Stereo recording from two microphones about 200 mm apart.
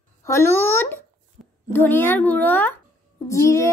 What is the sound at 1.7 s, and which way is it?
A child's voice, 10° left (ahead or behind).